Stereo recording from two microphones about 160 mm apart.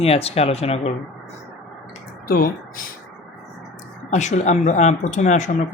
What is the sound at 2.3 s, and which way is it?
Speech, 60° left (ahead or behind).